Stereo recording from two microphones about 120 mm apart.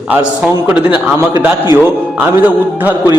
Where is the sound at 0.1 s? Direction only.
10° right (ahead or behind).